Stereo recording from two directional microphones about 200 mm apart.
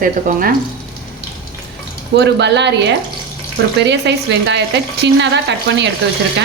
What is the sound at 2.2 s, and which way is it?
Speech, 60° right (ahead or behind).